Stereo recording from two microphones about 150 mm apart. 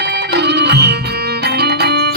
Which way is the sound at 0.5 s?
90° right.